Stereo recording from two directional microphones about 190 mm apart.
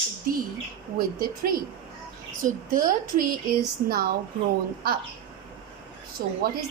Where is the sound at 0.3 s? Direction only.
50° right (ahead or behind).